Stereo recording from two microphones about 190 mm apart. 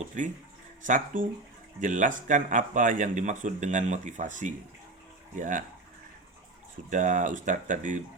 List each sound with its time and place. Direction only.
0.2 s speech: 40° right (ahead or behind)
6.9 s speech: 40° right (ahead or behind)